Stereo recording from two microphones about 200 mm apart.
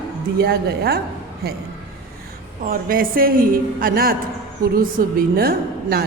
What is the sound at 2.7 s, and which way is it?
A woman's voice, 45° right (ahead or behind).